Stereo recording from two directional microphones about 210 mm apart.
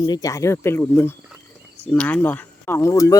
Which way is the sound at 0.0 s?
15° left (ahead or behind).